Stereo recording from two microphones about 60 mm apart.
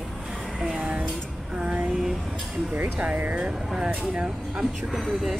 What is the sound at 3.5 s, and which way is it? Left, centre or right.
Speech, centre.